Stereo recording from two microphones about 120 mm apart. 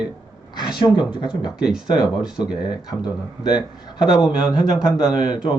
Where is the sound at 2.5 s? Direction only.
40° left (ahead or behind).